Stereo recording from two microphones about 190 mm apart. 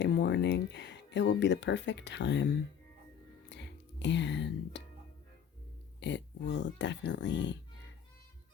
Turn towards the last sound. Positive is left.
turn(degrees=70)  # may be behind; listen again after turning